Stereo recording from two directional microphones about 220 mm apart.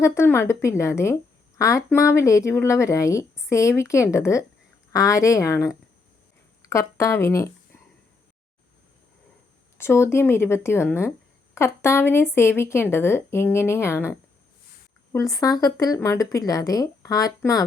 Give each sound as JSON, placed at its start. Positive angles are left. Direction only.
{"t": 0.0, "sound": "a woman's voice", "side_deg": 10}
{"t": 9.7, "sound": "a woman's voice", "side_deg": 10}